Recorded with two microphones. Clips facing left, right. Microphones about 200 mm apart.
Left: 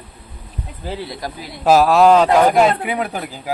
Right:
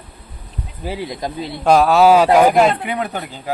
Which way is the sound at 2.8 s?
5° left (ahead or behind).